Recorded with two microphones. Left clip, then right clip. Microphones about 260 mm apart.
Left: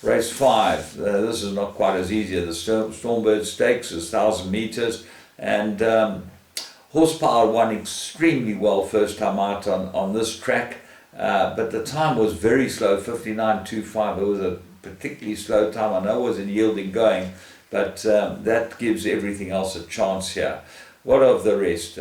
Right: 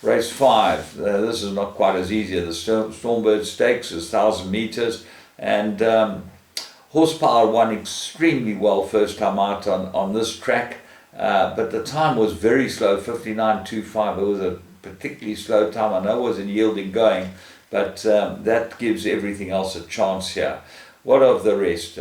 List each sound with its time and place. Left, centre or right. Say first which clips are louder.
0.0 s speech: right 2 dB; centre
2.7 s speech: right 2 dB; centre
3.2 s speech: right 1 dB; centre
8.6 s speech: right 1 dB; right
8.9 s speech: right 2 dB; centre
9.7 s speech: right 2 dB; right
10.2 s speech: right 1 dB; centre
14.1 s speech: right 1 dB; right
15.0 s speech: right 1 dB; centre